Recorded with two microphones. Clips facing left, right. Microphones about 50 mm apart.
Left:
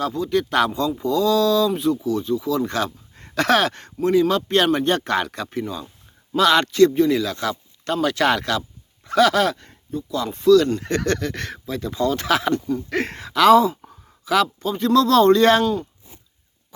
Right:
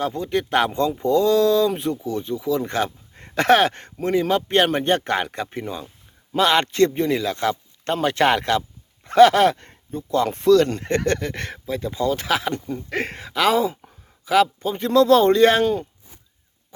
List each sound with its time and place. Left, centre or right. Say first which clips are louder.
0.0 s a man's voice: left 2 dB; right
0.7 s a man's voice: right 2 dB; right
10.8 s a man's voice: right 1 dB; right
12.5 s a man's voice: left 5 dB; right
12.9 s speech: left 2 dB; centre